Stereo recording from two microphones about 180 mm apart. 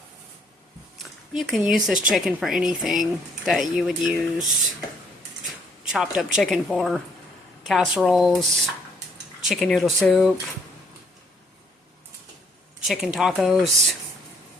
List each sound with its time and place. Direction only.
0.9 s speech: centre (ahead or behind)
5.9 s speech: 5° right (ahead or behind)
12.9 s speech: centre (ahead or behind)